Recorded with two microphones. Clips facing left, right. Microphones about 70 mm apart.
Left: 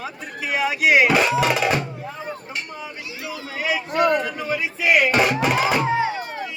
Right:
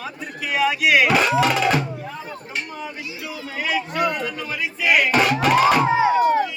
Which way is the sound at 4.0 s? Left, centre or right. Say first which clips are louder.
Left 6 dB; centre.